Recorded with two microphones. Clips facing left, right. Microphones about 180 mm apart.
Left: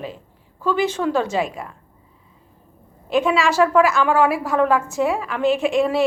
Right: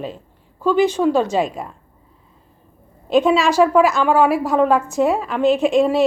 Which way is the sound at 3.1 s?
20° right (ahead or behind).